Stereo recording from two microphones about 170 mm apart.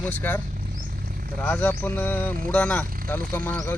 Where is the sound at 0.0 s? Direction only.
10° left (ahead or behind).